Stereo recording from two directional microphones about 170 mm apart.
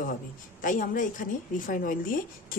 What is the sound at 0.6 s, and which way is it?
A woman's voice, 50° left (ahead or behind).